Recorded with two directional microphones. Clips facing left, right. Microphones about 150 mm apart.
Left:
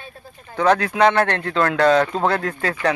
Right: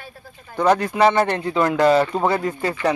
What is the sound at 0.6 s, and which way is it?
Speech, 5° right (ahead or behind).